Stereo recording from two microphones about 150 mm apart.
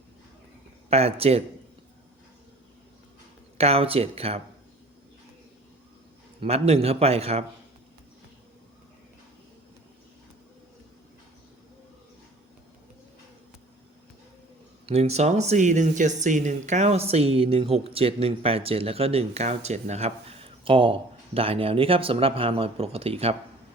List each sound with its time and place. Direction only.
0.9 s a man's voice: 40° right (ahead or behind)
3.6 s speech: 40° right (ahead or behind)
6.4 s a man's voice: 40° right (ahead or behind)
14.8 s speech: 45° right (ahead or behind)